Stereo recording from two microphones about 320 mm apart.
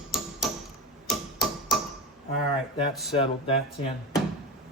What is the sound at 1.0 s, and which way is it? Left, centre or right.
Hammer, centre.